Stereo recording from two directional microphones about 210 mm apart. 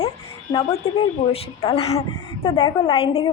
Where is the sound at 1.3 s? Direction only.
30° left (ahead or behind).